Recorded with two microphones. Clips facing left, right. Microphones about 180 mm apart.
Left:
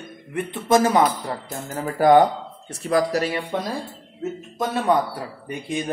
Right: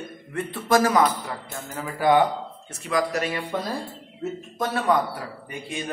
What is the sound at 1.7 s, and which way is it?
A man's voice, 40° left (ahead or behind).